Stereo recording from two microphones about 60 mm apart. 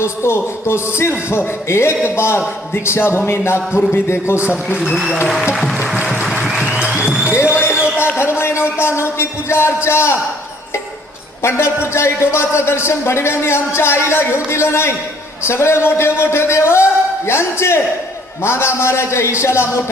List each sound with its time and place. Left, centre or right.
0.0 s a man's voice: left
4.4 s a man's voice: right
4.9 s speech: centre
6.3 s music: centre
6.7 s music: centre
7.3 s a sound: left
8.2 s a man's voice: left
11.4 s a man's voice: left